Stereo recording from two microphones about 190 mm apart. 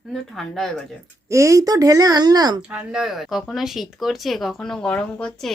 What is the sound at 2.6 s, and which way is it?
Speech, 5° right (ahead or behind).